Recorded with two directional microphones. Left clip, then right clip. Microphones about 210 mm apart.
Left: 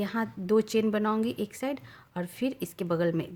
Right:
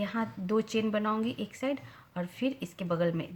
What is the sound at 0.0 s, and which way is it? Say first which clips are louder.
Speech: left 2 dB; 45° left (ahead or behind).